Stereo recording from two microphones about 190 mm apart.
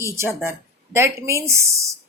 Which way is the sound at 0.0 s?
15° right (ahead or behind).